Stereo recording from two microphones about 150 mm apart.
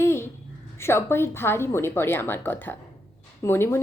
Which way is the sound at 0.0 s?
15° left (ahead or behind).